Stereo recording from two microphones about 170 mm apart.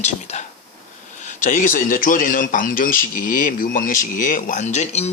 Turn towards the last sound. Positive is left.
turn(degrees=40)  # may be behind; listen again after turning